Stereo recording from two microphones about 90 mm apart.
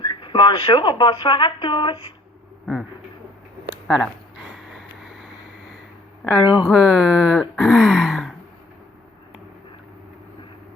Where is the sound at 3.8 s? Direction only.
Centre (ahead or behind).